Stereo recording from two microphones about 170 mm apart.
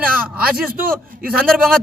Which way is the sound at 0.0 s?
5° right (ahead or behind).